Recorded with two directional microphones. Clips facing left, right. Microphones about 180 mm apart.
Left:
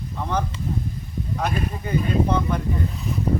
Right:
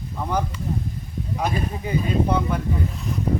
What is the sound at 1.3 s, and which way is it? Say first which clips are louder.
Speech: right 1 dB; 10° right (ahead or behind).